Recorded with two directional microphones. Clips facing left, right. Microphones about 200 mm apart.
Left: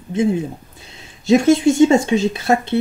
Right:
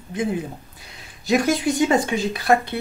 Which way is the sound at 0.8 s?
25° left (ahead or behind).